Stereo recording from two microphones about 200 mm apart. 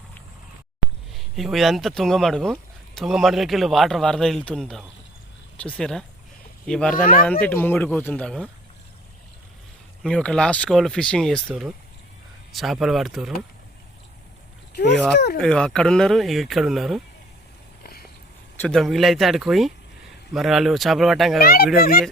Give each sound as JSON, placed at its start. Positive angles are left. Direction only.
{"t": 1.1, "sound": "speech", "side_deg": 0}
{"t": 6.9, "sound": "speech", "side_deg": 45}
{"t": 7.4, "sound": "speech", "side_deg": 10}
{"t": 10.0, "sound": "speech", "side_deg": 5}
{"t": 15.4, "sound": "speech", "side_deg": 5}
{"t": 18.6, "sound": "speech", "side_deg": 0}
{"t": 21.4, "sound": "speech", "side_deg": 50}